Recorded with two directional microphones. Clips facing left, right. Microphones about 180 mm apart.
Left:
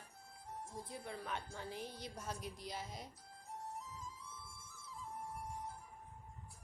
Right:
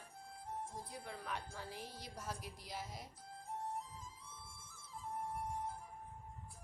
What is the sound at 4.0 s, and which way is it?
Music, 55° right (ahead or behind).